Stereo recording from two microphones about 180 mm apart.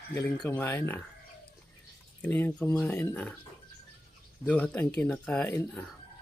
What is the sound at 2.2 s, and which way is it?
Speech, 10° left (ahead or behind).